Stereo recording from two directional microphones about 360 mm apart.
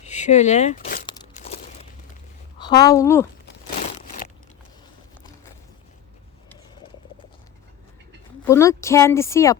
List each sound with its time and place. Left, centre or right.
0.0 s speech: centre
1.0 s crunch: centre
2.6 s speech: centre
8.4 s speech: centre